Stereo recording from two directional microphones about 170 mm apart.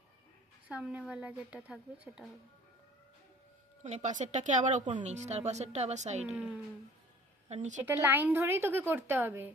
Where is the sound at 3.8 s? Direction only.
45° right (ahead or behind).